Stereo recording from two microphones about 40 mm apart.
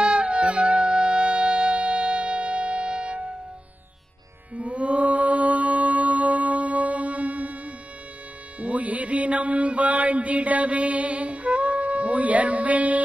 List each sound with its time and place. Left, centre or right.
0.0 s music: right
4.6 s music: right